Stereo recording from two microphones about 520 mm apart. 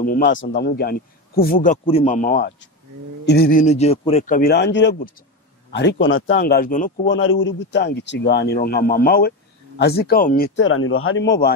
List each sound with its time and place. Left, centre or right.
0.0 s a man's voice: centre